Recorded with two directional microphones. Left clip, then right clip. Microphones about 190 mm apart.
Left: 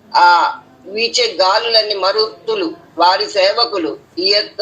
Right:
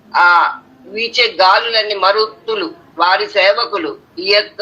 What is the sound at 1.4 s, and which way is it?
A man's voice, 30° right (ahead or behind).